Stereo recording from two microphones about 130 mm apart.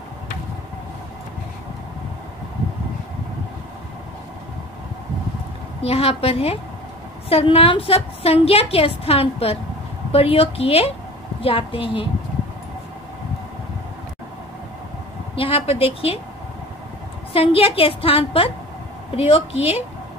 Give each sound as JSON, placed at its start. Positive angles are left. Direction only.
{"t": 5.8, "sound": "a woman's voice", "side_deg": 50}
{"t": 15.3, "sound": "a woman's voice", "side_deg": 45}
{"t": 17.3, "sound": "a woman's voice", "side_deg": 45}